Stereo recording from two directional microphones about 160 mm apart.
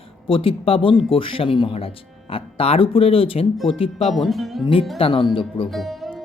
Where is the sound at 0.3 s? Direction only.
35° left (ahead or behind).